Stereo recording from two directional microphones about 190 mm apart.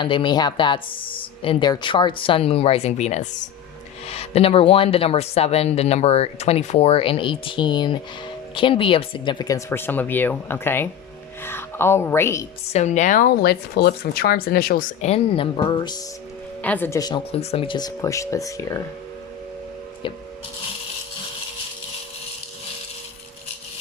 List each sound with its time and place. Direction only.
0.0 s speech: 25° left (ahead or behind)
12.7 s speech: 35° left (ahead or behind)
15.0 s speech: 30° left (ahead or behind)
16.6 s speech: 10° left (ahead or behind)
17.3 s speech: 30° left (ahead or behind)